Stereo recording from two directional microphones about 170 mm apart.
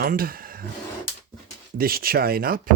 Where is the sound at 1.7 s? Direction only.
60° right (ahead or behind).